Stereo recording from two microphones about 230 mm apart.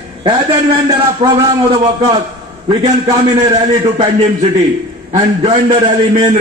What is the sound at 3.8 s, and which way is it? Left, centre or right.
A man's voice, right.